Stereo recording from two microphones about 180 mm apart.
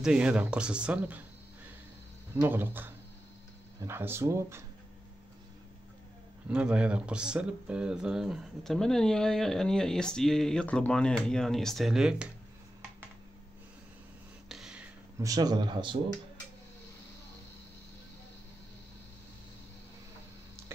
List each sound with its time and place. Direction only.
0.0 s speech: 5° right (ahead or behind)
2.4 s speech: 10° right (ahead or behind)
6.5 s speech: 5° right (ahead or behind)
14.5 s a sound: 5° right (ahead or behind)
15.1 s speech: 20° right (ahead or behind)